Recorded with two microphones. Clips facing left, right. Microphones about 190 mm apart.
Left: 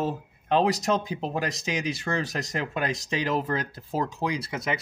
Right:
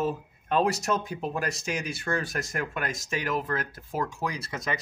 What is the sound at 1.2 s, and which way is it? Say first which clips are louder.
Speech: left 1 dB; 30° left (ahead or behind).